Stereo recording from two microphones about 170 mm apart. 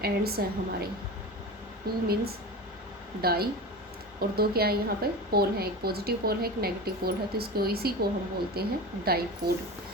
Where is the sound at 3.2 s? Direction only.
65° right (ahead or behind).